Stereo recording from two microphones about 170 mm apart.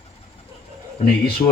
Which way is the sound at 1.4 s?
20° left (ahead or behind).